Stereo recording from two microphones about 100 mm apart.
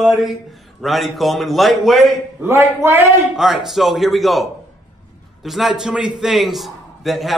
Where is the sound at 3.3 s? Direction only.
5° right (ahead or behind).